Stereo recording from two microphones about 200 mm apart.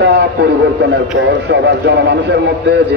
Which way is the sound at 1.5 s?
60° right (ahead or behind).